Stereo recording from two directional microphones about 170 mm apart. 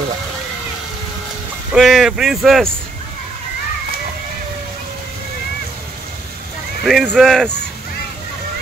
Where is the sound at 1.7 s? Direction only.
Centre (ahead or behind).